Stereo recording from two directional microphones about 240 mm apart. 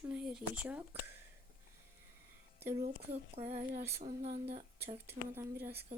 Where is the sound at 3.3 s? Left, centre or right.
Right.